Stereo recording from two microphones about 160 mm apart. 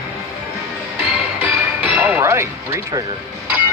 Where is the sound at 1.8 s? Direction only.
10° right (ahead or behind).